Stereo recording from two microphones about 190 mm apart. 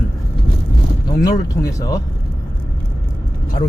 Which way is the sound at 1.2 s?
15° left (ahead or behind).